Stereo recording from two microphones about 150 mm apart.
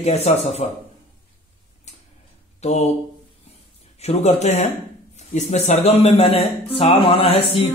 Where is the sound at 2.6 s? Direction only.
50° left (ahead or behind).